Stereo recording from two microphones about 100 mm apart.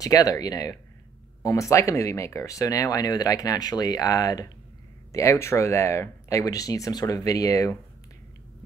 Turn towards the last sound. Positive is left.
turn(degrees=35)  # may be behind; listen again after turning